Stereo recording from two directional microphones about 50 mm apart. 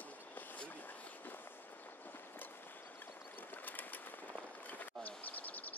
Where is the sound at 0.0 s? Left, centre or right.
Left.